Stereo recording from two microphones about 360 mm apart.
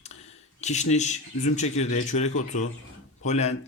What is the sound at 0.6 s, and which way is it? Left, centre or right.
Speech, centre.